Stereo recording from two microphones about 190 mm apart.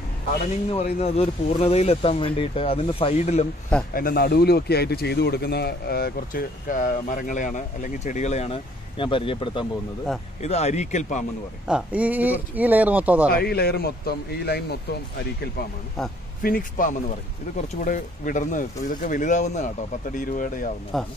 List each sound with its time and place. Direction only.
0.7 s speech: 30° left (ahead or behind)
3.9 s speech: 50° left (ahead or behind)
11.6 s speech: 5° right (ahead or behind)
13.3 s a man's voice: 55° left (ahead or behind)
16.0 s a man's voice: centre (ahead or behind)
16.4 s speech: 45° left (ahead or behind)
20.9 s a man's voice: centre (ahead or behind)